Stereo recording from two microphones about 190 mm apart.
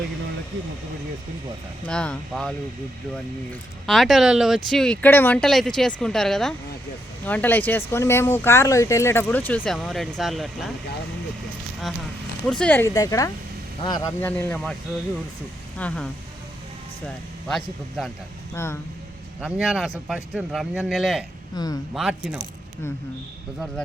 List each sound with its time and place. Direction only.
1.9 s speech: 5° left (ahead or behind)
12.5 s speech: 5° left (ahead or behind); by 14.1 s 20° left (ahead or behind)
14.2 s speech: 10° left (ahead or behind)
15.8 s speech: 5° left (ahead or behind)
17.5 s speech: centre (ahead or behind)
18.5 s speech: 15° left (ahead or behind)
19.4 s speech: 5° right (ahead or behind)
21.5 s speech: 20° left (ahead or behind)
21.9 s speech: 5° right (ahead or behind)